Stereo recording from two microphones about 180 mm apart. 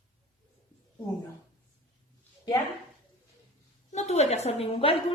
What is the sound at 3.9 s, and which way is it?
A woman's voice, 35° left (ahead or behind).